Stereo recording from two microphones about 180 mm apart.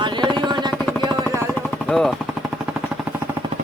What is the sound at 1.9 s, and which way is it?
Vehicle, 5° left (ahead or behind).